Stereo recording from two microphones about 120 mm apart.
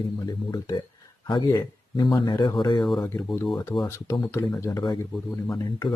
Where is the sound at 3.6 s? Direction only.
30° left (ahead or behind).